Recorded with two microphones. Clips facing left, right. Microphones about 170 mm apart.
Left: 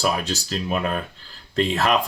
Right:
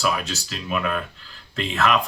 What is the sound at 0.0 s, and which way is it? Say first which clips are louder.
Speech: left 1 dB; 35° left (ahead or behind).